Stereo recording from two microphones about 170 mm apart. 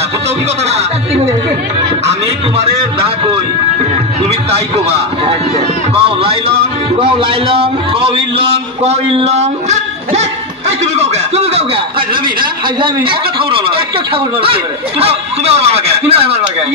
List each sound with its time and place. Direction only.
4.5 s a man's voice: 35° right (ahead or behind)